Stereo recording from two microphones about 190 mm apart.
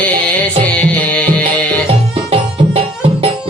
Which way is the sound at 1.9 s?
30° right (ahead or behind).